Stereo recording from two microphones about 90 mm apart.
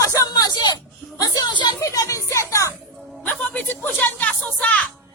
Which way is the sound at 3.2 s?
20° left (ahead or behind).